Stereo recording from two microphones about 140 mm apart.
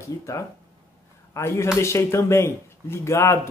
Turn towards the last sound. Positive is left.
turn(degrees=20)  # may be behind; listen again after turning